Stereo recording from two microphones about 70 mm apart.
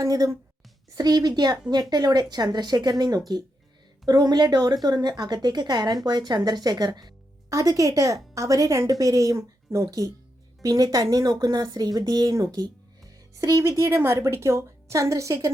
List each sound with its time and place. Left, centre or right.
0.0 s a woman's voice: right
0.9 s a woman's voice: right
6.1 s speech: right
7.5 s a woman's voice: right